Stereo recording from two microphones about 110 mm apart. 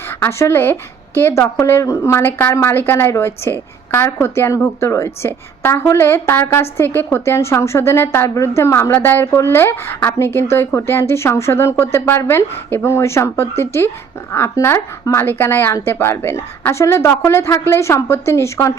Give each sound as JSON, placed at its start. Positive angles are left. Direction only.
{"t": 0.1, "sound": "a woman's voice", "side_deg": 25}